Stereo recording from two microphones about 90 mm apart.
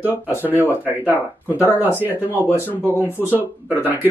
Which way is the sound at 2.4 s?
30° left (ahead or behind).